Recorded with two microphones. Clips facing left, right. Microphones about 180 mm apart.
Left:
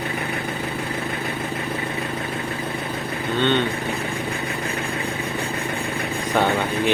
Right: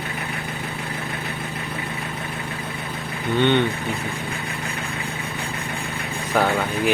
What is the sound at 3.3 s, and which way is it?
Speech, 15° right (ahead or behind).